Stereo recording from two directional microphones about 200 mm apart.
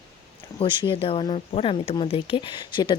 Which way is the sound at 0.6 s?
25° left (ahead or behind).